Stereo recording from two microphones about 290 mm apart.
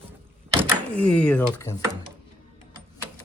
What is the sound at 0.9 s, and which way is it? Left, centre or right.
Speech, centre.